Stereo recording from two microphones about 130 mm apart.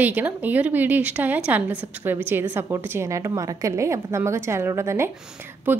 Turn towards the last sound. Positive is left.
turn(degrees=-15)  # may be behind; listen again after turning